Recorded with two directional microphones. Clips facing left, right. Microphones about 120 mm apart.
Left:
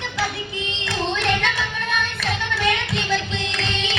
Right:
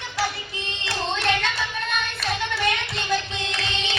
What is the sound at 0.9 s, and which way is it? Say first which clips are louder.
Music: left 2 dB; 55° left (ahead or behind).